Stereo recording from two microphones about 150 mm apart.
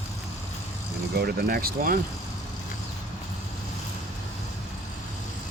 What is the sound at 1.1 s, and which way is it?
Speech, 90° right.